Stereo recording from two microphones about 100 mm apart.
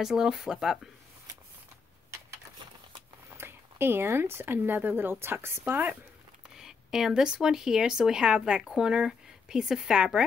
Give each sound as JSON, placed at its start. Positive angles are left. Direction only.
{"t": 0.0, "sound": "speech", "side_deg": -5}
{"t": 3.3, "sound": "a woman's voice", "side_deg": -25}
{"t": 6.4, "sound": "speech", "side_deg": -5}